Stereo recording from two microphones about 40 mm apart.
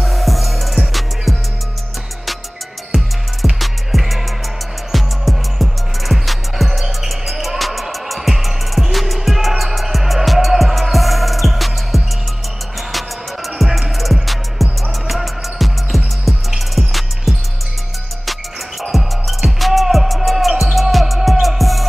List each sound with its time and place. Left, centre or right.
0.0 s music: centre
3.5 s music: centre
13.7 s music: centre